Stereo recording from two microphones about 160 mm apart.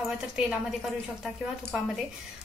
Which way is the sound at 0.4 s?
5° right (ahead or behind).